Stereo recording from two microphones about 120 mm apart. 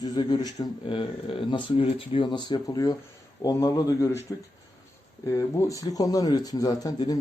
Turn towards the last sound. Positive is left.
turn(degrees=30)  # may be behind; listen again after turning